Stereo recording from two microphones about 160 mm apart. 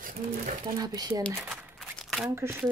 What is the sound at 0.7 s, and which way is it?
Speech, 25° right (ahead or behind).